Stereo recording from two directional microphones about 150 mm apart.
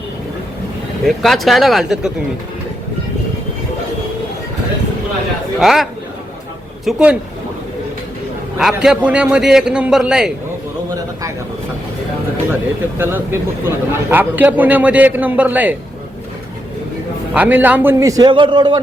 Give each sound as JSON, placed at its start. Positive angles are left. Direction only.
{"t": 1.0, "sound": "a man's voice", "side_deg": 0}
{"t": 5.5, "sound": "a man's voice", "side_deg": 0}
{"t": 8.5, "sound": "a man's voice", "side_deg": -5}
{"t": 13.0, "sound": "speech", "side_deg": -15}
{"t": 17.3, "sound": "a man's voice", "side_deg": -10}